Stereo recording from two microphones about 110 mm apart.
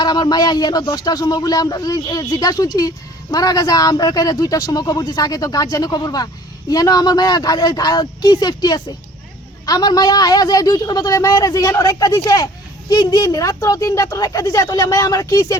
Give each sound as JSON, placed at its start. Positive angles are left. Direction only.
{"t": 0.0, "sound": "speech", "side_deg": 40}